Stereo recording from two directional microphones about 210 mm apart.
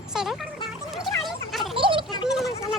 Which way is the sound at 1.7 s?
25° right (ahead or behind).